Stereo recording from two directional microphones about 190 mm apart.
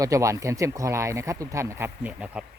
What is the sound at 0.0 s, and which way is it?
Speech, 15° right (ahead or behind).